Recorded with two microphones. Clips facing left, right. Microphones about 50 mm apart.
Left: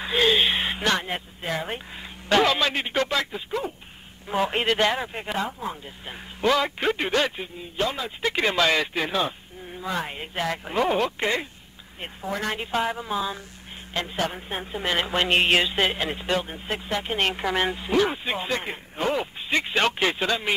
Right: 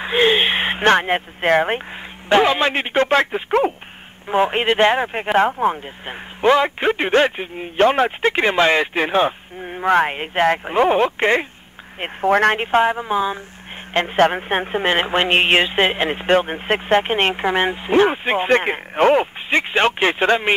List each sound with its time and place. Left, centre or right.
0.0 s speech: right
2.2 s speech: right
4.3 s speech: right
6.0 s speech: right
7.6 s speech: right
8.2 s speech: right
12.0 s speech: right
13.9 s speech: right
14.9 s speech: right
19.5 s speech: right